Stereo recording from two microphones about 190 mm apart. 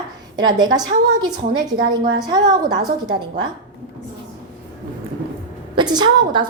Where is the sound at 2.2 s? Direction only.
20° right (ahead or behind).